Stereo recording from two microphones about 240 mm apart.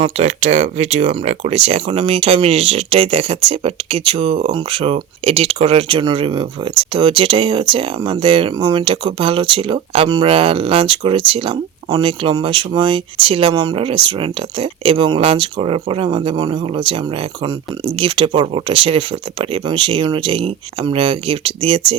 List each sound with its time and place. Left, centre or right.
0.0 s speech: right